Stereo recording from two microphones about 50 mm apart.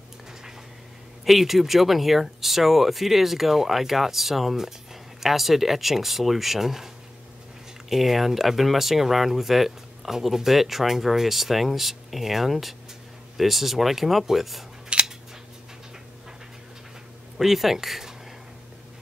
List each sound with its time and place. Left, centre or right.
1.2 s speech: centre
7.9 s speech: centre
14.9 s scissors: centre
17.4 s speech: centre